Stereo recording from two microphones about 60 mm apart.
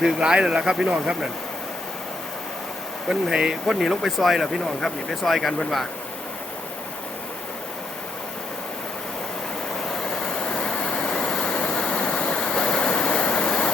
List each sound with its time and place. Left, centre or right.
0.0 s speech: centre
3.1 s speech: centre
10.6 s a sound: centre